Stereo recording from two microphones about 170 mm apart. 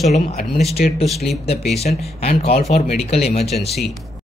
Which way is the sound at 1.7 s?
40° left (ahead or behind).